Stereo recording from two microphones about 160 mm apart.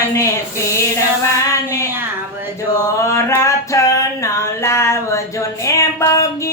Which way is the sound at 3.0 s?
15° left (ahead or behind).